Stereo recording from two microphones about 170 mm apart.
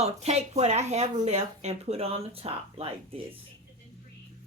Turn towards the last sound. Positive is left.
turn(degrees=-35)  # may be behind; listen again after turning